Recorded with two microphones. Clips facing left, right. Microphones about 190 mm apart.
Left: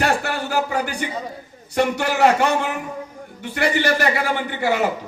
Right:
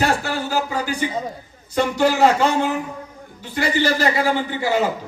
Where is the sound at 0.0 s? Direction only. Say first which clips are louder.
Right 1 dB; 65° left (ahead or behind).